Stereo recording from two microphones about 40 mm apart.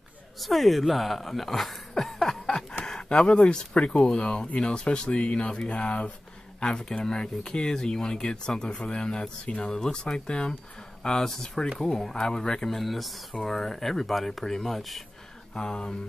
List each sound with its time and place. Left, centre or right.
0.4 s speech: centre
2.2 s a sound: centre
3.5 s speech: left
6.7 s speech: centre
12.6 s speech: centre
15.5 s speech: centre